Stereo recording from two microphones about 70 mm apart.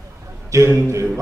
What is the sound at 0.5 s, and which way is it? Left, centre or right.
Speech, right.